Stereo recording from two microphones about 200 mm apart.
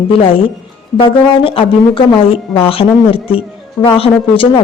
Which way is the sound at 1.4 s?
25° left (ahead or behind).